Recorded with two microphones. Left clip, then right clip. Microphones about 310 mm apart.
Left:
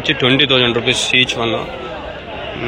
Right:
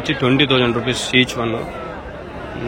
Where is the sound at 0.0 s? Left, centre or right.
Centre.